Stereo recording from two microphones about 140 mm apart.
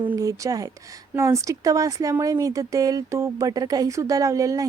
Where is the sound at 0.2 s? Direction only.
25° right (ahead or behind).